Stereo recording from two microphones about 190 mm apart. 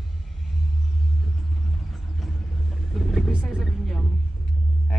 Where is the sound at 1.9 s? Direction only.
Centre (ahead or behind).